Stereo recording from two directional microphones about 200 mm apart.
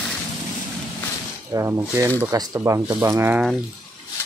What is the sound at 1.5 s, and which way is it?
Speech, 15° right (ahead or behind).